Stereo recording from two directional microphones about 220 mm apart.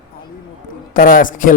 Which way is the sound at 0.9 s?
40° left (ahead or behind).